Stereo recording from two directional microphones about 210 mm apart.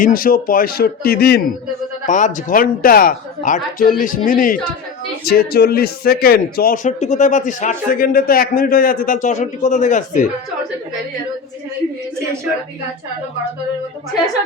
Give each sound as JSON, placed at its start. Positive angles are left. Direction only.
{"t": 0.0, "sound": "a man's voice", "side_deg": 45}
{"t": 2.0, "sound": "a man's voice", "side_deg": 35}